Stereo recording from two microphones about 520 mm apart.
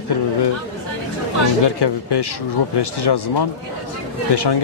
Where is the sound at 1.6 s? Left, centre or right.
Left.